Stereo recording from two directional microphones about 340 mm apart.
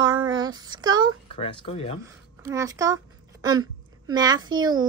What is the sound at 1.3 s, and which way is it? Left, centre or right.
Speech, centre.